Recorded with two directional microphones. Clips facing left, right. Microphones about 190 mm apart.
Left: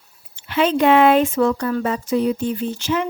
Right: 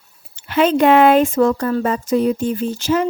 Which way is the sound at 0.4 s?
45° right (ahead or behind).